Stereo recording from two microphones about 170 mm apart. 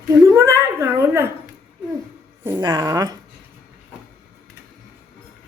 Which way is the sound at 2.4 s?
15° right (ahead or behind).